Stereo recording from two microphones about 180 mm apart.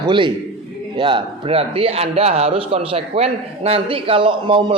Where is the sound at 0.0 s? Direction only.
25° right (ahead or behind).